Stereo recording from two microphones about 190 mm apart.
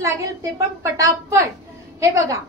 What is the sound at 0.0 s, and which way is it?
A woman's voice, 15° right (ahead or behind).